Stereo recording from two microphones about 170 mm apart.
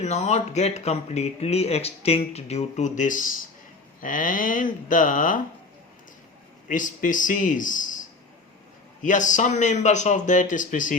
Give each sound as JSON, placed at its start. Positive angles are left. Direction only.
{"t": 0.0, "sound": "a man's voice", "side_deg": 40}
{"t": 6.7, "sound": "a man's voice", "side_deg": 50}